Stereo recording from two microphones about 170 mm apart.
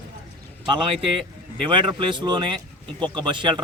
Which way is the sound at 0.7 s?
30° right (ahead or behind).